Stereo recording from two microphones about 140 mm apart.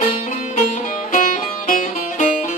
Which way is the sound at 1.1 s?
70° left (ahead or behind).